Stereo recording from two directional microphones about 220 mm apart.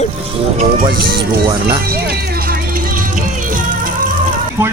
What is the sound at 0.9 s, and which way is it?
Speech, 45° right (ahead or behind).